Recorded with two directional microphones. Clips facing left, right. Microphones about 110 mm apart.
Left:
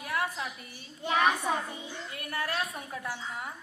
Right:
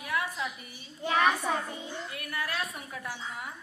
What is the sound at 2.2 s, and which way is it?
Speech, 30° left (ahead or behind).